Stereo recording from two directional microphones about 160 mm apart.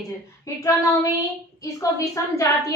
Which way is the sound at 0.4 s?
20° left (ahead or behind).